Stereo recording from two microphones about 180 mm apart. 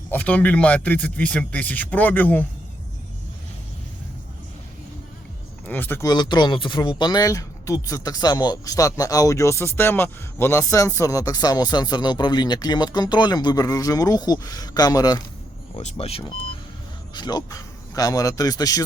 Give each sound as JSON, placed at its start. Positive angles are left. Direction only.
{"t": 0.1, "sound": "a man's voice", "side_deg": 10}
{"t": 5.6, "sound": "speech", "side_deg": 10}
{"t": 15.7, "sound": "speech", "side_deg": 35}